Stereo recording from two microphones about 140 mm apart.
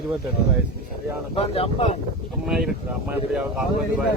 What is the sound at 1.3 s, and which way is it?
Speech, 45° left (ahead or behind).